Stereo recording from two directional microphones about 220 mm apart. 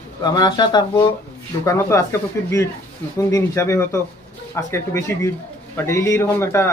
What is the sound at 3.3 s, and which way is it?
Speech, 15° left (ahead or behind).